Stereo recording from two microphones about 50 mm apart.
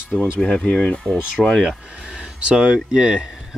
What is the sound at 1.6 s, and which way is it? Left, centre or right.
Speech, centre.